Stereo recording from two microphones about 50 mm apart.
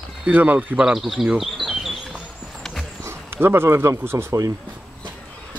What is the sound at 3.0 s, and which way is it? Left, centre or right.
Speech, right.